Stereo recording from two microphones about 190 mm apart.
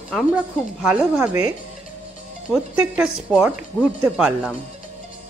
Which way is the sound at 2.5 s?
5° right (ahead or behind).